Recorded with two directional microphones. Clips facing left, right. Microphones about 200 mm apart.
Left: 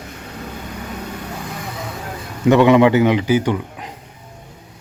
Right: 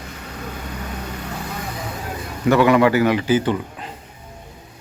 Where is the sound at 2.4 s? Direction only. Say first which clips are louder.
Left 3 dB; 20° left (ahead or behind).